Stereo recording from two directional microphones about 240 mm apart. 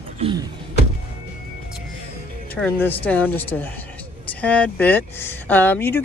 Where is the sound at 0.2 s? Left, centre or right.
Centre.